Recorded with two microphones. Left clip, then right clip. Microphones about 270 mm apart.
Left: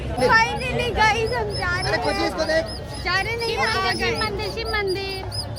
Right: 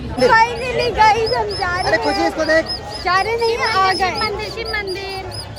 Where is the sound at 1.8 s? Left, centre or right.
Right.